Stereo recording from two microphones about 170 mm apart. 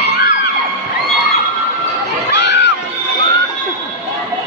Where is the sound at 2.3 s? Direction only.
90° left.